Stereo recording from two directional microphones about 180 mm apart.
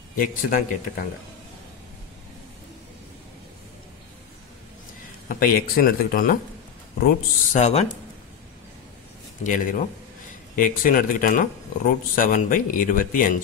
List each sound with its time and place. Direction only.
0.2 s speech: 50° left (ahead or behind)
5.3 s speech: 50° left (ahead or behind)
7.6 s speech: 35° left (ahead or behind)
9.4 s speech: 45° left (ahead or behind)